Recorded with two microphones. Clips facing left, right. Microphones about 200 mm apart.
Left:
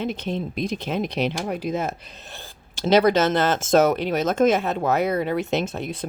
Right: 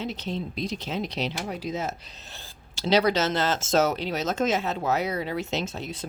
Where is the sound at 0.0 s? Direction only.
55° left (ahead or behind).